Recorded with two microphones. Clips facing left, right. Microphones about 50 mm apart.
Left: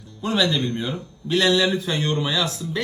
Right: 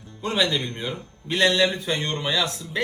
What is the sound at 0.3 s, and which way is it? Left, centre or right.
A man's voice, right.